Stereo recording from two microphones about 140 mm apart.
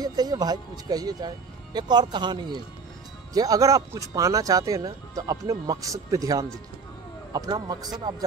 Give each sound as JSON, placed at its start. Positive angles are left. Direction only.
{"t": 0.0, "sound": "speech", "side_deg": -30}